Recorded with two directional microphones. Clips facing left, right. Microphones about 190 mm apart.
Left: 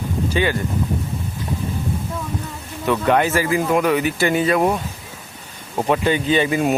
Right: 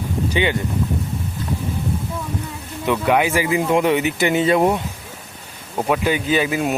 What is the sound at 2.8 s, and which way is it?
Speech, 10° right (ahead or behind).